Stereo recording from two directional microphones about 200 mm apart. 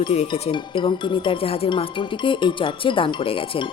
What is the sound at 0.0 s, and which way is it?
Speech, 25° left (ahead or behind).